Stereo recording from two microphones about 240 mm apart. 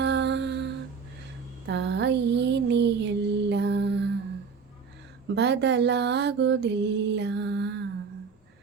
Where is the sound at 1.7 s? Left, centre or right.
Right.